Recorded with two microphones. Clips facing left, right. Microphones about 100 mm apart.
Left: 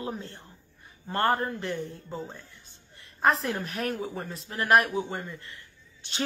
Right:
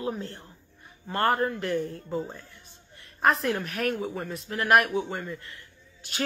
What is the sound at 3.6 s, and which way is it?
Speech, 30° left (ahead or behind).